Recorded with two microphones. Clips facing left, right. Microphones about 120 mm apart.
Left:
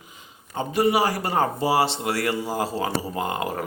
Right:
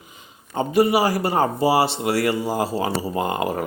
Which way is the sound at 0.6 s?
10° right (ahead or behind).